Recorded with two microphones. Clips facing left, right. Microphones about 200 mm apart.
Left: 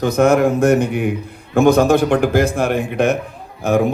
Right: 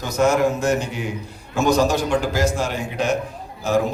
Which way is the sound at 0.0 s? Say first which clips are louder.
Left 5 dB; 55° left (ahead or behind).